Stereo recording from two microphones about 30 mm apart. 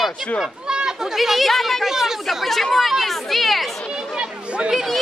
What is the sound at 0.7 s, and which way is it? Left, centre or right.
Children playing, right.